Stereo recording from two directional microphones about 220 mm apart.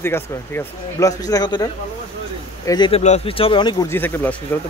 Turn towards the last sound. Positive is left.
turn(degrees=10)  # may be behind; listen again after turning